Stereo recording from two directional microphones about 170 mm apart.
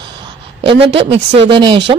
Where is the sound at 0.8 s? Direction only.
35° right (ahead or behind).